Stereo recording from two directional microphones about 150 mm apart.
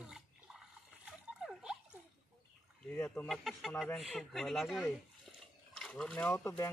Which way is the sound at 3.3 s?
Centre (ahead or behind).